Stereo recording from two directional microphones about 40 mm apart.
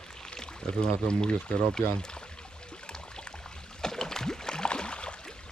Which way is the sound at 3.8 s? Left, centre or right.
Centre.